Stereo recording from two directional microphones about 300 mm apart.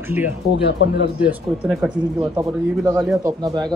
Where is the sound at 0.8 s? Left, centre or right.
Left.